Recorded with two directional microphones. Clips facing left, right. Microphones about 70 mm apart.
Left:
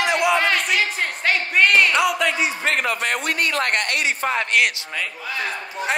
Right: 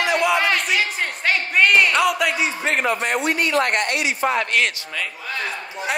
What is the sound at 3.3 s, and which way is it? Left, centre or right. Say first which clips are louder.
Speech: right 3 dB; left.